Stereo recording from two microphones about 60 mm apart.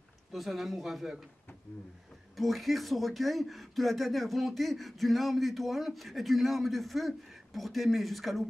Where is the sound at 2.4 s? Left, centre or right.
Centre.